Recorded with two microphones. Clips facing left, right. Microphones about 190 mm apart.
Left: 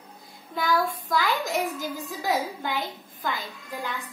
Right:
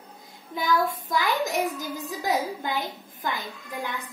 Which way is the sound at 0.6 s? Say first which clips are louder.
Right 1 dB; 20° right (ahead or behind).